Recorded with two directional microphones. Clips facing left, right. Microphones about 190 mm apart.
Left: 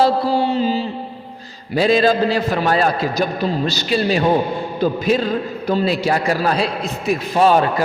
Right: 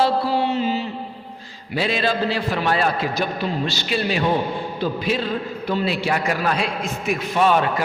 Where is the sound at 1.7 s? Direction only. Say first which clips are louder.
Left 7 dB; 40° left (ahead or behind).